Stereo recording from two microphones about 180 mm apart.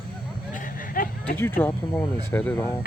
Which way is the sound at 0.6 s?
50° left (ahead or behind).